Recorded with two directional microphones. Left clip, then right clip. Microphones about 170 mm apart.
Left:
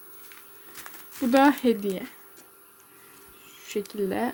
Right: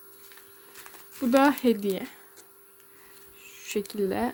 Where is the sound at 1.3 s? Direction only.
10° right (ahead or behind).